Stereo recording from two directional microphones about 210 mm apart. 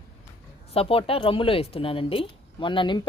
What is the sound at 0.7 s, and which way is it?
Speech, 25° left (ahead or behind).